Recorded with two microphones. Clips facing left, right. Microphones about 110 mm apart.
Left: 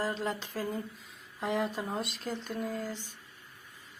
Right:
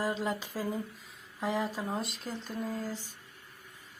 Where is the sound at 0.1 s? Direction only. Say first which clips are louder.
Right 1 dB; 5° right (ahead or behind).